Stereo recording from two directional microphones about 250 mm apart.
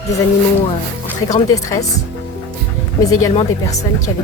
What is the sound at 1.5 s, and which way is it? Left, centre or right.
Speech, centre.